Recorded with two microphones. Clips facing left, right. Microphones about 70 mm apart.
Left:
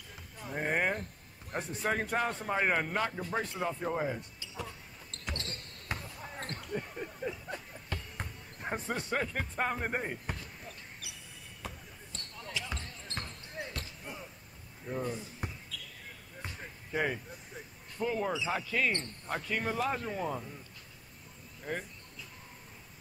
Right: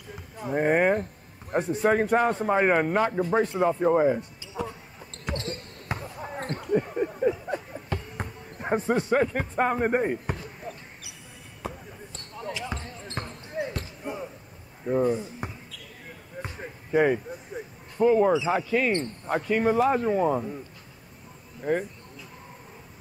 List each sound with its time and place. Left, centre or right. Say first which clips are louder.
0.5 s a man's voice: right 10 dB; right
5.1 s basketball bounce: right 9 dB; centre
6.1 s basketball bounce: right 9 dB; right
6.6 s a sound: right 16 dB; right
8.5 s speech: right 11 dB; right
11.0 s basketball bounce: right 3 dB; centre
15.0 s speech: right 11 dB; right